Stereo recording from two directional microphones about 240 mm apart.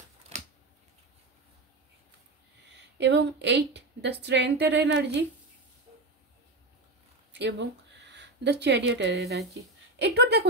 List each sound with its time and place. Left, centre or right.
0.3 s a sound: right
3.0 s a woman's voice: right
7.3 s speech: right